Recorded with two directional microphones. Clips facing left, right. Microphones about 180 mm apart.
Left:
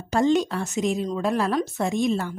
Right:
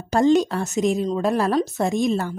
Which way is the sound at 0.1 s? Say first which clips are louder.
Right 3 dB; 40° right (ahead or behind).